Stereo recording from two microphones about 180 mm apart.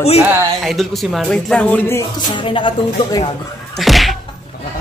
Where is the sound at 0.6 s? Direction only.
Centre (ahead or behind).